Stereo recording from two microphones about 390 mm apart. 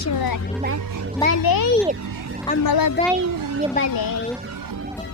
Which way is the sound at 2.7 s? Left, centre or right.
Left.